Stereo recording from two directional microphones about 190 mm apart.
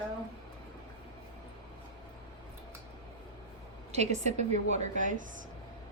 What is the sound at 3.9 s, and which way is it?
A woman's voice, 35° right (ahead or behind).